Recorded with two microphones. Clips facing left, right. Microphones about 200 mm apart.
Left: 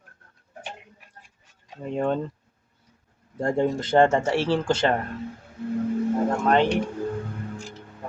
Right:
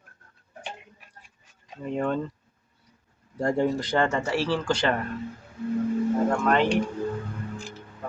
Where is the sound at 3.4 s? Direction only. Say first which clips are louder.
Left 1 dB; 25° left (ahead or behind).